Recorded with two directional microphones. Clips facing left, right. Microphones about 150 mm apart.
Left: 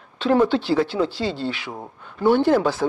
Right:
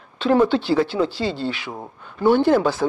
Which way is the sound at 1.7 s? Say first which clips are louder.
Right 1 dB; 35° right (ahead or behind).